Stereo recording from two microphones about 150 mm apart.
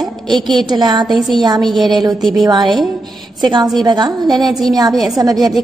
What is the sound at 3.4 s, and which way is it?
Speech, 30° right (ahead or behind).